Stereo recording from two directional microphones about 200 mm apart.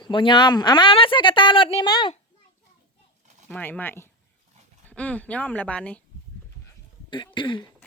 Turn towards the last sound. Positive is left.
turn(degrees=25)  # may be behind; listen again after turning